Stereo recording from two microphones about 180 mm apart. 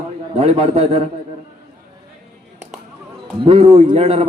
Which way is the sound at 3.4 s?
35° right (ahead or behind).